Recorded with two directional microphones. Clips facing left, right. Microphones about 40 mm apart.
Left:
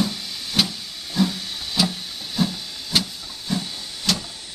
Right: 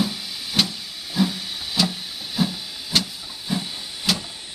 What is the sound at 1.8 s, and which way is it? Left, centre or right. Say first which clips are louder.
Hiss: even; centre.